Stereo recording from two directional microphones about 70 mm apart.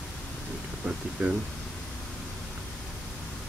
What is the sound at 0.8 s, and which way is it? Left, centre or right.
Speech, centre.